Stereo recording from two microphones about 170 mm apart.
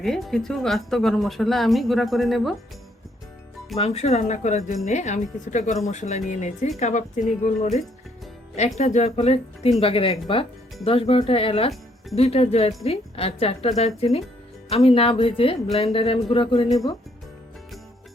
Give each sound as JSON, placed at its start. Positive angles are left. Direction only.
{"t": 0.0, "sound": "speech", "side_deg": 0}
{"t": 3.8, "sound": "speech", "side_deg": 40}
{"t": 8.8, "sound": "speech", "side_deg": 40}